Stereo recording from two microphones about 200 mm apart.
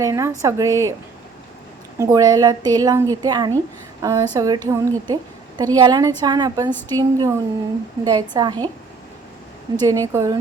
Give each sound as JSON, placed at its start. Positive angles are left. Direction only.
{"t": 0.0, "sound": "a woman's voice", "side_deg": -15}
{"t": 2.0, "sound": "a woman's voice", "side_deg": -15}
{"t": 9.8, "sound": "a woman's voice", "side_deg": -15}